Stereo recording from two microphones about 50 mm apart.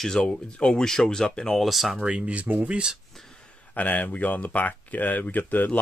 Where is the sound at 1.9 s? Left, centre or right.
Centre.